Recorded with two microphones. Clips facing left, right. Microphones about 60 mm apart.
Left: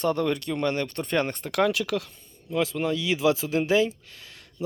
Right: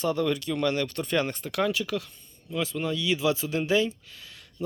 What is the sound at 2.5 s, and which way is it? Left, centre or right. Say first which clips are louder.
Speech: left 4 dB; left.